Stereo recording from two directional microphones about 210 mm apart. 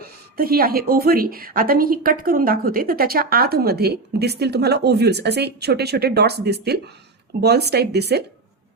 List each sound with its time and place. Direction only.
0.0 s a woman's voice: 45° right (ahead or behind)